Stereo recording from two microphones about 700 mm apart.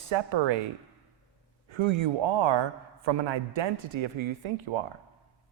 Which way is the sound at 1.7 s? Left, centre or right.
Right.